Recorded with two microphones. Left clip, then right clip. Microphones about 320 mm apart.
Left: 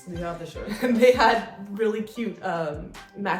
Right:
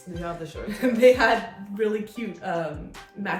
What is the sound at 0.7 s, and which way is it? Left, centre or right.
A woman's voice, centre.